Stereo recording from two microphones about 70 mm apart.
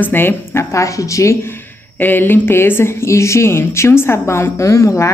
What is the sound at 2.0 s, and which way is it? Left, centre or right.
Speech, left.